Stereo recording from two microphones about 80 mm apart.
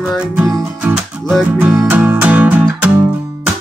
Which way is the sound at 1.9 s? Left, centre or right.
Right.